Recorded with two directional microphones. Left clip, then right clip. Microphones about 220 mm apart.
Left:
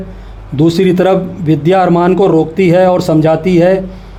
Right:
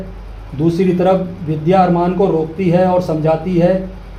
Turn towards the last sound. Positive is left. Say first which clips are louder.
# left 5 dB
turn(degrees=50)  # may be behind; listen again after turning